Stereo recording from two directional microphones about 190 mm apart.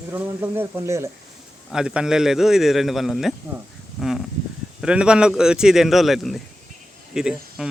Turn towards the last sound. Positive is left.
turn(degrees=-5)  # may be behind; listen again after turning